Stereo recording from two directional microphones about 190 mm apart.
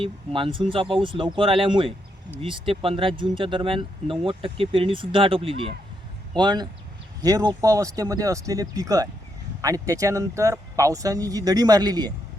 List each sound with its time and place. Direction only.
0.0 s speech: 25° right (ahead or behind)